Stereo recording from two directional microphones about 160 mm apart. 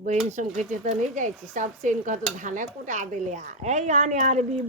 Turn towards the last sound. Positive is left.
turn(degrees=-45)  # may be behind; listen again after turning